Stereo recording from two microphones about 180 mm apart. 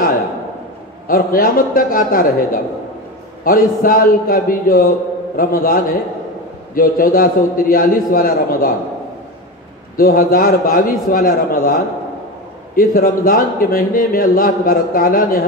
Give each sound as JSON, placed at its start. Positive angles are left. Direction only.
{"t": 1.0, "sound": "a man's voice", "side_deg": 50}
{"t": 9.9, "sound": "a man's voice", "side_deg": 50}